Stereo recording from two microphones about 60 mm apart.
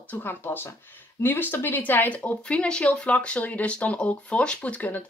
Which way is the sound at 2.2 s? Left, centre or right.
Centre.